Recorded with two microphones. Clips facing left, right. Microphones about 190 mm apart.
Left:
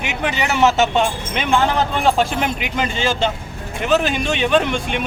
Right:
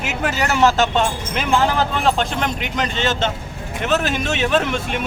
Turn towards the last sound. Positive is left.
turn(degrees=0)  # may be behind; listen again after turning